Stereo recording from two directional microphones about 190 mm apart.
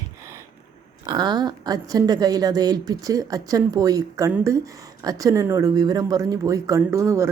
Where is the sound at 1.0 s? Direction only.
20° right (ahead or behind).